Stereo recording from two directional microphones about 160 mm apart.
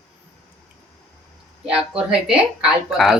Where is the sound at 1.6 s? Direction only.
5° right (ahead or behind).